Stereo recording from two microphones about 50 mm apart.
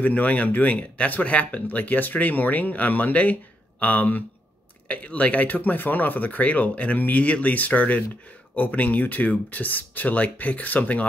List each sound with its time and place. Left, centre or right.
0.0 s speech: left